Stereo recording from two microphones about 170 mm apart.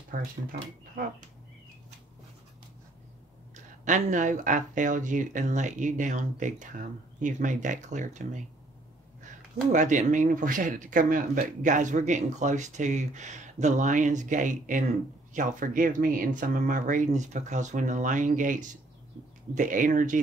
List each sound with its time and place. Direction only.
0.1 s speech: 60° right (ahead or behind)
3.5 s speech: 45° right (ahead or behind)